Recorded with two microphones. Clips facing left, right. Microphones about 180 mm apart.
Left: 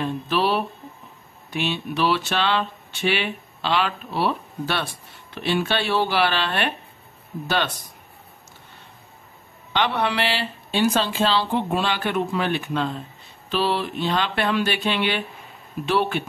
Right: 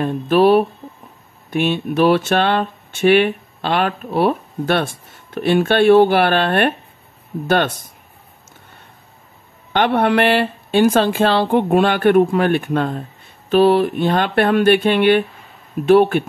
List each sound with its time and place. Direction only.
0.0 s speech: 50° right (ahead or behind)
9.7 s speech: 55° right (ahead or behind)